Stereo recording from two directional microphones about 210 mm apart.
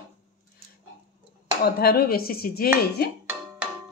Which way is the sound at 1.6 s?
45° left (ahead or behind).